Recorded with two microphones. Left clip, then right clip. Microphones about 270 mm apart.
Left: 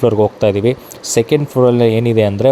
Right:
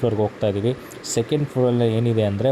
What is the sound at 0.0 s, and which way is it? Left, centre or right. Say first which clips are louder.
Speech: left 9 dB; left.